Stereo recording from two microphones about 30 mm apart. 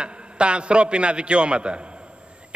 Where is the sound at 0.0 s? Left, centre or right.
Right.